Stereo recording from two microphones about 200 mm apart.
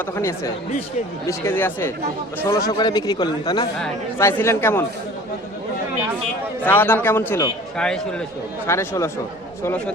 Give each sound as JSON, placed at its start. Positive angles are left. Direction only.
{"t": 0.2, "sound": "a man's voice", "side_deg": 15}
{"t": 6.6, "sound": "a man's voice", "side_deg": 10}